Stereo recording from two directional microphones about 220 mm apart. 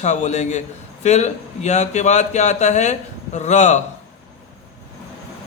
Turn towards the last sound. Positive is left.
turn(degrees=35)  # may be behind; listen again after turning